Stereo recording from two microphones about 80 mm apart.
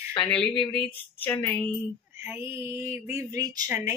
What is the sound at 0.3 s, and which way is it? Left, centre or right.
Speech, centre.